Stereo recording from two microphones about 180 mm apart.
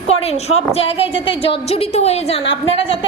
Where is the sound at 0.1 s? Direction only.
35° left (ahead or behind).